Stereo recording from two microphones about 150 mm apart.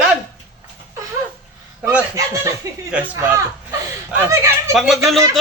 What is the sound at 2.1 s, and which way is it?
A man's voice, 20° right (ahead or behind).